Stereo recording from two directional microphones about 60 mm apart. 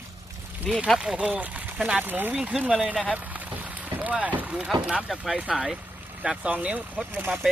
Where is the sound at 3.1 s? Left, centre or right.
Right.